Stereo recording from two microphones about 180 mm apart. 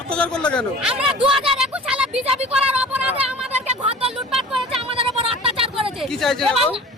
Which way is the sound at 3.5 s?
35° right (ahead or behind).